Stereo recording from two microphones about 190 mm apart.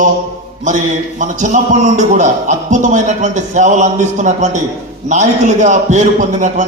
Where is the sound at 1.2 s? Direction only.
40° right (ahead or behind).